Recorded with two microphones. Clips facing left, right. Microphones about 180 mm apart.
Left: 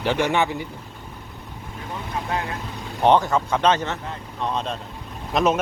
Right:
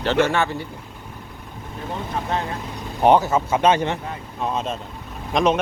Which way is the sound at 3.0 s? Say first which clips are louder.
Right 2 dB; 5° right (ahead or behind).